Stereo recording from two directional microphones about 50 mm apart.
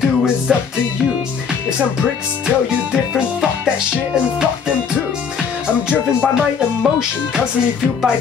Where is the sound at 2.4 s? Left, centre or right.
Centre.